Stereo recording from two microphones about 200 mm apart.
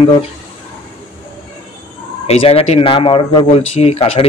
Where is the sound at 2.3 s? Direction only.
30° left (ahead or behind).